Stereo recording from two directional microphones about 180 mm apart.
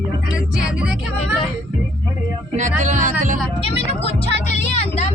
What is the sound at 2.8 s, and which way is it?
Speech, 45° right (ahead or behind).